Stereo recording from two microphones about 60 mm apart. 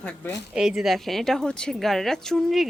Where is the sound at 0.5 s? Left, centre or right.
Centre.